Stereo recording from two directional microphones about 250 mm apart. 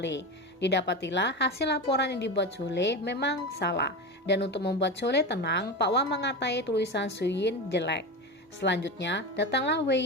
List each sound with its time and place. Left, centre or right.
0.0 s speech: left